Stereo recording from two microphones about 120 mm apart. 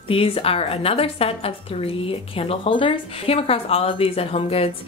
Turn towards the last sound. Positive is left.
turn(degrees=55)  # may be behind; listen again after turning